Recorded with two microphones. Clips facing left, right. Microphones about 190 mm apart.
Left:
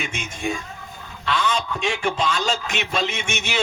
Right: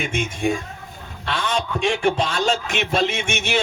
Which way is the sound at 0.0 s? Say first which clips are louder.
Right 5 dB; 55° right (ahead or behind).